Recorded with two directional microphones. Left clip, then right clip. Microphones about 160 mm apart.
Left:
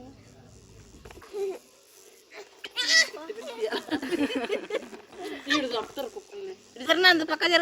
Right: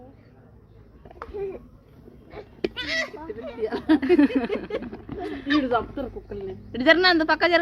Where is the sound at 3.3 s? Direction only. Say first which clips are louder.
Right 2 dB; 5° right (ahead or behind).